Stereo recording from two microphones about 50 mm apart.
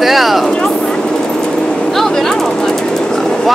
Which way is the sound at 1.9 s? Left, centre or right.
Centre.